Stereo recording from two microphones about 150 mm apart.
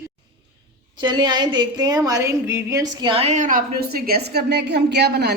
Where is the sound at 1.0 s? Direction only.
30° right (ahead or behind).